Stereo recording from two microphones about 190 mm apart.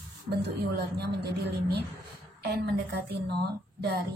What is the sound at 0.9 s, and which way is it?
Speech, 60° right (ahead or behind).